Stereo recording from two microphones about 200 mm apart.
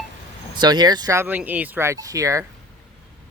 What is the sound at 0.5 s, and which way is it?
Speech, 20° right (ahead or behind).